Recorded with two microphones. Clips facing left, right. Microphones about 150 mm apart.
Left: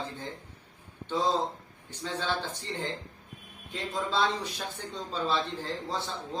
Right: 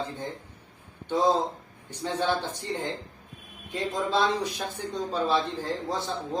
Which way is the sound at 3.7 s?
15° right (ahead or behind).